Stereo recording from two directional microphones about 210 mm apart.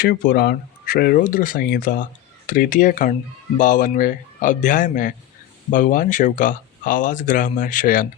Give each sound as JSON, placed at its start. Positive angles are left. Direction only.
{"t": 0.0, "sound": "speech", "side_deg": 45}